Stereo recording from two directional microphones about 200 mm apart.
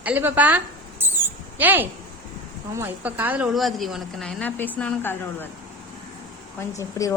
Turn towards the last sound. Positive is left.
turn(degrees=15)  # may be behind; listen again after turning